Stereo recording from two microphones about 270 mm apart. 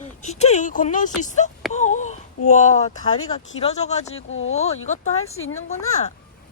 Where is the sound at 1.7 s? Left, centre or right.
Left.